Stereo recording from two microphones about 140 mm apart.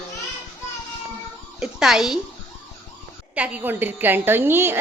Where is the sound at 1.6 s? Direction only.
5° right (ahead or behind).